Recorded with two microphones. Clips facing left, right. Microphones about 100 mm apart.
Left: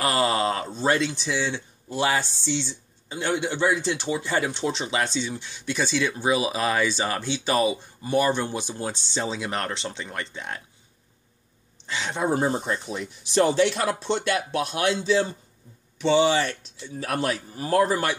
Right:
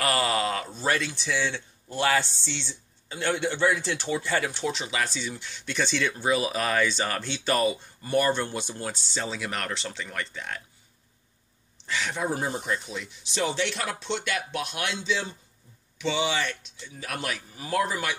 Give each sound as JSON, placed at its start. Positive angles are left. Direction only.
{"t": 0.0, "sound": "speech", "side_deg": 25}
{"t": 11.8, "sound": "speech", "side_deg": 20}